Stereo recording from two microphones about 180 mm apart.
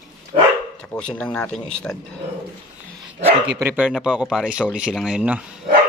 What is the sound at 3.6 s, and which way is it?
Speech, 10° right (ahead or behind).